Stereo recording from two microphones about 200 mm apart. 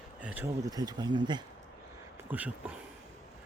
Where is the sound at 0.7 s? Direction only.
20° right (ahead or behind).